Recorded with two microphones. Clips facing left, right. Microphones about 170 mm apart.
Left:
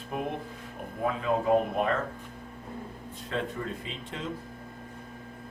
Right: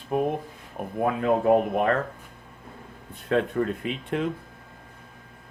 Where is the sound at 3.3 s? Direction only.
65° right (ahead or behind).